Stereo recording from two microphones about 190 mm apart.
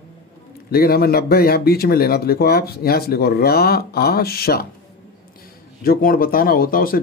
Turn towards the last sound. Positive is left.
turn(degrees=50)  # may be behind; listen again after turning